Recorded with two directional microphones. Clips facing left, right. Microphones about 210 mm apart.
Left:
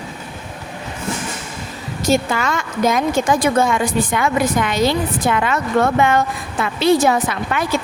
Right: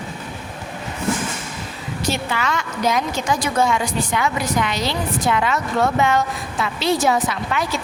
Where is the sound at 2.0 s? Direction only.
45° left (ahead or behind).